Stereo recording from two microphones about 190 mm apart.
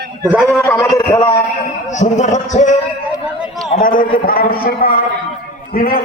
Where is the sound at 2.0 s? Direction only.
40° left (ahead or behind).